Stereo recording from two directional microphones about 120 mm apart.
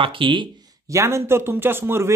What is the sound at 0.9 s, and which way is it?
Speech, 20° right (ahead or behind).